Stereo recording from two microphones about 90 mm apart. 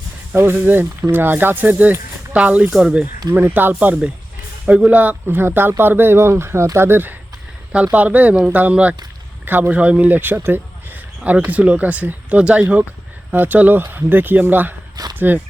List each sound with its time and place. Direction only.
0.5 s speech: 20° right (ahead or behind)
3.3 s speech: 20° right (ahead or behind)
15.0 s a sound: 45° right (ahead or behind)